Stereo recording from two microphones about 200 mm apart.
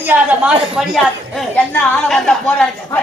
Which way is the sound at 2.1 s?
5° left (ahead or behind).